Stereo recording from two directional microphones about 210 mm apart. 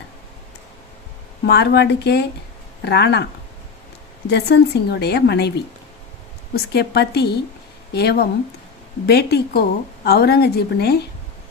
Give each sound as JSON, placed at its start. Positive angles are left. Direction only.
{"t": 1.5, "sound": "a woman's voice", "side_deg": 50}
{"t": 4.3, "sound": "a woman's voice", "side_deg": 50}